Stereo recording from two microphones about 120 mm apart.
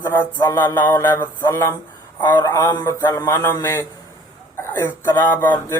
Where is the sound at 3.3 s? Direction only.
20° left (ahead or behind).